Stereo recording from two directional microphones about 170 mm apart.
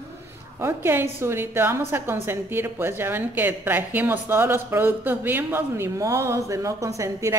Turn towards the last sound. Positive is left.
turn(degrees=-20)  # may be behind; listen again after turning